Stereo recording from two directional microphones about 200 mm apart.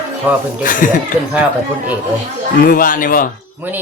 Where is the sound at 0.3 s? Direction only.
10° right (ahead or behind).